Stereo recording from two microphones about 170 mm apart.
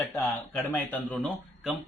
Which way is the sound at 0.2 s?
10° left (ahead or behind).